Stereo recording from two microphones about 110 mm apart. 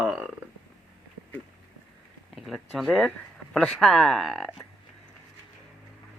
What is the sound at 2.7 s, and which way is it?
Speech, 5° left (ahead or behind).